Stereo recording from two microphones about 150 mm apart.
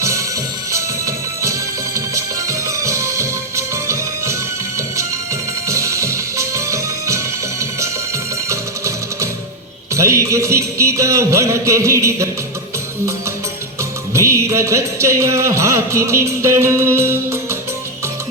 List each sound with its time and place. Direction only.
0.0 s music: 20° right (ahead or behind)
8.4 s music: 20° right (ahead or behind)
14.1 s music: 20° right (ahead or behind)